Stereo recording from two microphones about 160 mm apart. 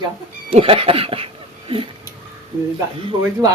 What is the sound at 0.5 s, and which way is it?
Speech, 35° right (ahead or behind).